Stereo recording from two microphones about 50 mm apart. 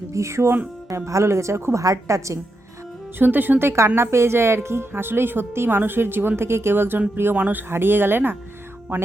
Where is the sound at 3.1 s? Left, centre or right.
Right.